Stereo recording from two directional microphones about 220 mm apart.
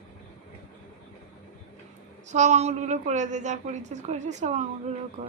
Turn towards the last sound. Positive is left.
turn(degrees=-30)  # may be behind; listen again after turning